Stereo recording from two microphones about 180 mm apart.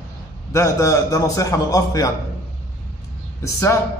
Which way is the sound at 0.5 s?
15° left (ahead or behind).